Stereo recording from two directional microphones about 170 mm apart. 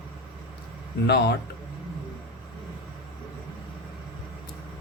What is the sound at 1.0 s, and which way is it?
Speech, 75° left (ahead or behind).